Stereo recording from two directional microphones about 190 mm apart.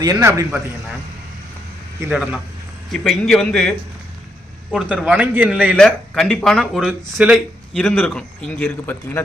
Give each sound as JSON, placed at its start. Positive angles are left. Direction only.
{"t": 0.0, "sound": "a man's voice", "side_deg": -15}
{"t": 2.0, "sound": "a man's voice", "side_deg": -5}
{"t": 5.7, "sound": "speech", "side_deg": 5}